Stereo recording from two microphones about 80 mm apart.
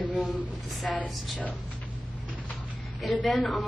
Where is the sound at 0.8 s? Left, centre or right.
Centre.